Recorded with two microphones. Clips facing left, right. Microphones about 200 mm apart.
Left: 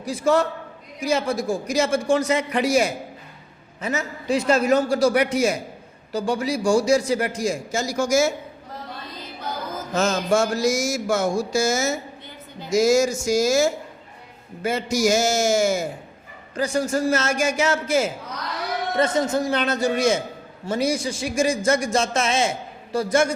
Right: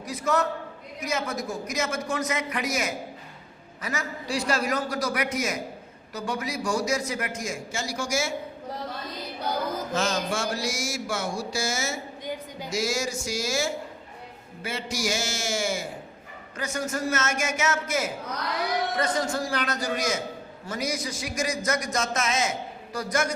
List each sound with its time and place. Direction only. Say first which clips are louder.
0.0 s a man's voice: left 6 dB; 30° left (ahead or behind)
9.9 s a sound: left 9 dB; 40° left (ahead or behind)
16.6 s a man's voice: left 8 dB; 30° left (ahead or behind)